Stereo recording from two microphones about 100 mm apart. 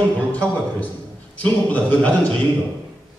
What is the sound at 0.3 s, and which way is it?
A man's voice, 15° left (ahead or behind).